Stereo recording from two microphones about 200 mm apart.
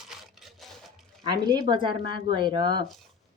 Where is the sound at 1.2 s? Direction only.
20° right (ahead or behind).